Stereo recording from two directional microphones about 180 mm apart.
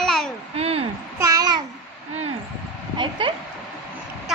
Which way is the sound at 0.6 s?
35° right (ahead or behind).